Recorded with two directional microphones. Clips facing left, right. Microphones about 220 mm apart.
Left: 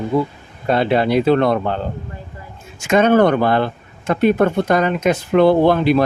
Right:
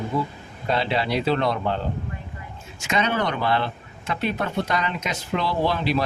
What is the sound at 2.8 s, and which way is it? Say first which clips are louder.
Speech: left 11 dB; 50° left (ahead or behind).